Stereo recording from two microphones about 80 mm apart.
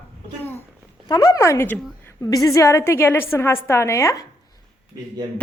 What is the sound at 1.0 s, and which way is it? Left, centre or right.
Speech, left.